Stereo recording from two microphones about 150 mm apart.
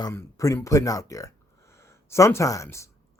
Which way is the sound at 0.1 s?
20° left (ahead or behind).